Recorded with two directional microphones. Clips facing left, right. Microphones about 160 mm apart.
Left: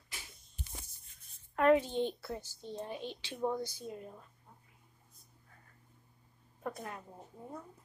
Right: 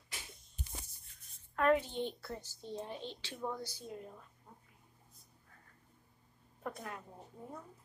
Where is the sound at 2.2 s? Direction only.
5° left (ahead or behind).